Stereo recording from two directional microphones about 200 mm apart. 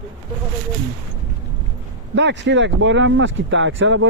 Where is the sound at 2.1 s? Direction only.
60° right (ahead or behind).